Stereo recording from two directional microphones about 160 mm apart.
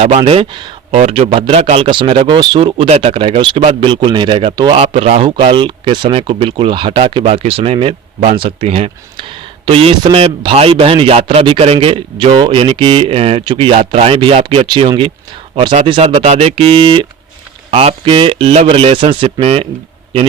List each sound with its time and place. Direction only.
0.0 s a man's voice: 40° right (ahead or behind)
0.9 s a man's voice: 40° right (ahead or behind)